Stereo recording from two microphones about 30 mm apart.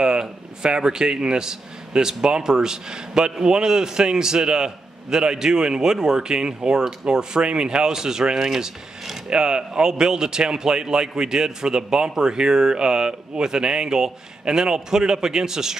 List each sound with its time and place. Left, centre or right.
0.0 s a man's voice: right